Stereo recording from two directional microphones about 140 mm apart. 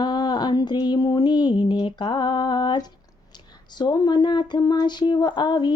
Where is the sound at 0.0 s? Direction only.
30° left (ahead or behind).